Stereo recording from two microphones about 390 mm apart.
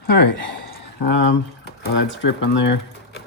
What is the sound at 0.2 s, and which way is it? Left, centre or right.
Speech, left.